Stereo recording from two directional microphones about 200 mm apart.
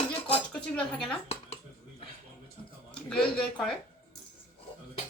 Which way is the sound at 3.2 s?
Centre (ahead or behind).